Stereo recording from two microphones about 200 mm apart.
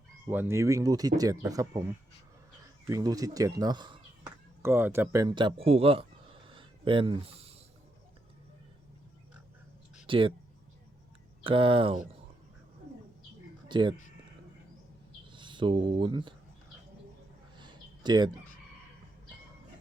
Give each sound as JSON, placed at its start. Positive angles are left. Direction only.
{"t": 0.3, "sound": "speech", "side_deg": -10}
{"t": 2.8, "sound": "speech", "side_deg": -15}
{"t": 6.5, "sound": "a sound", "side_deg": -25}
{"t": 10.1, "sound": "speech", "side_deg": -25}
{"t": 11.4, "sound": "speech", "side_deg": -25}
{"t": 13.7, "sound": "speech", "side_deg": -25}
{"t": 15.3, "sound": "speech", "side_deg": -25}
{"t": 17.6, "sound": "a sound", "side_deg": -20}